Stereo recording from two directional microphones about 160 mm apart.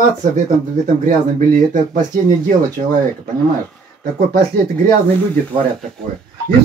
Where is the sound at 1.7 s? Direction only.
50° right (ahead or behind).